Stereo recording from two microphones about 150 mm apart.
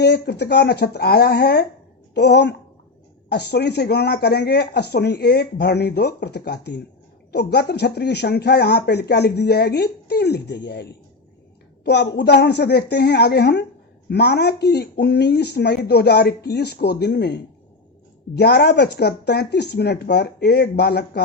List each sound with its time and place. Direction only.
0.0 s speech: 90° left
3.2 s speech: 90° left
11.9 s speech: 90° left